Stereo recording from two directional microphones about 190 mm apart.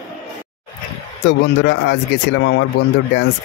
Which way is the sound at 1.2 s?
65° left (ahead or behind).